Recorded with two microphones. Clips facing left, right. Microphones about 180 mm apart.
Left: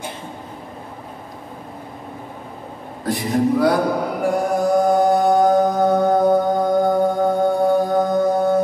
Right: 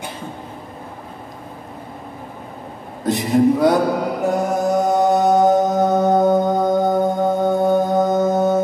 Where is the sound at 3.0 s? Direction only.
20° right (ahead or behind).